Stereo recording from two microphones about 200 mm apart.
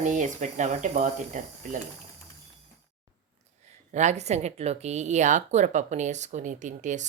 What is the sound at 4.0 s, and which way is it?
Speech, 35° right (ahead or behind).